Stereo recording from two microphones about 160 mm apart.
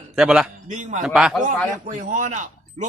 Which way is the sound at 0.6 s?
50° right (ahead or behind).